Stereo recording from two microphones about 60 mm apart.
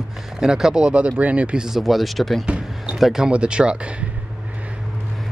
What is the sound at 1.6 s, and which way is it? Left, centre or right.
Speech, centre.